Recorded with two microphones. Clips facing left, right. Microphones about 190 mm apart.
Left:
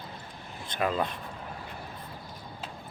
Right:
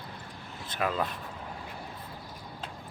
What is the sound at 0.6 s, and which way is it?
Speech, 5° right (ahead or behind).